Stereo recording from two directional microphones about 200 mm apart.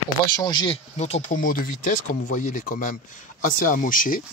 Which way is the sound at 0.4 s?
20° left (ahead or behind).